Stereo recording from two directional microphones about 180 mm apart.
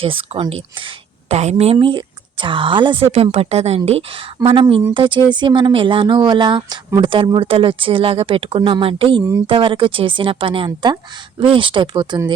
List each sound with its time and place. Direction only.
0.0 s a woman's voice: 30° right (ahead or behind)
4.4 s speech: 25° right (ahead or behind)